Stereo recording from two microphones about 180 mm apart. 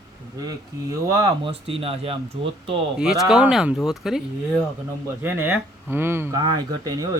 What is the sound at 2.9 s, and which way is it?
Speech, 5° right (ahead or behind).